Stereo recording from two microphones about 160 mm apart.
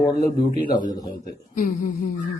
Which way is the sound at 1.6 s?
55° left (ahead or behind).